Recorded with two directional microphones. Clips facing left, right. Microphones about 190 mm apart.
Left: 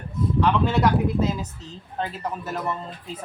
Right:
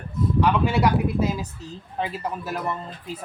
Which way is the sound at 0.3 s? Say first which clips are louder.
Even; 10° right (ahead or behind).